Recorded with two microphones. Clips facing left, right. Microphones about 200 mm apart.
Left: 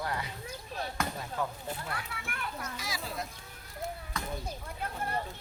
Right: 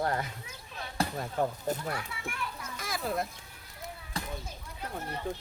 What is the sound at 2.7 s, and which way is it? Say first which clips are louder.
Speech: right 5 dB; 55° right (ahead or behind).